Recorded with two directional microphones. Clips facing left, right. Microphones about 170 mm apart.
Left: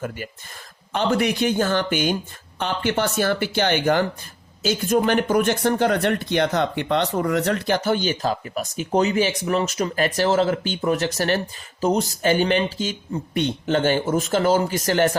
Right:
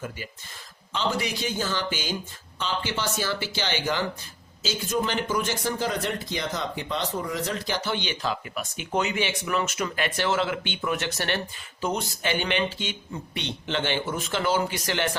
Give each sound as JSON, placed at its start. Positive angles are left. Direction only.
{"t": 0.9, "sound": "speech", "side_deg": 55}
{"t": 7.9, "sound": "speech", "side_deg": 45}